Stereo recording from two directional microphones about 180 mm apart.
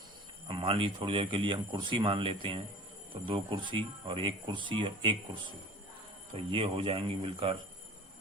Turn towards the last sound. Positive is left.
turn(degrees=-30)  # may be behind; listen again after turning